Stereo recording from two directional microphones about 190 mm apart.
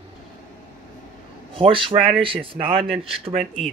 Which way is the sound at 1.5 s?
30° right (ahead or behind).